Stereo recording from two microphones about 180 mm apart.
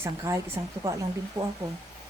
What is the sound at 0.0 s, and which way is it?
Speech, 15° right (ahead or behind).